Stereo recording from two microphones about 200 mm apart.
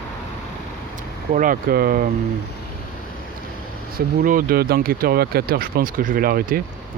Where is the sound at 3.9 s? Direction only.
45° right (ahead or behind).